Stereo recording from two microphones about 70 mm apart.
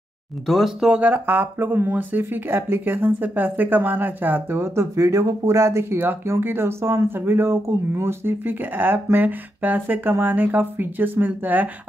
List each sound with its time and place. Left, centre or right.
0.5 s speech: centre; by 11.7 s right